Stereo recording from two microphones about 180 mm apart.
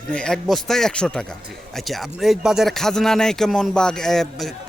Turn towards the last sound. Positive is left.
turn(degrees=0)  # may be behind; listen again after turning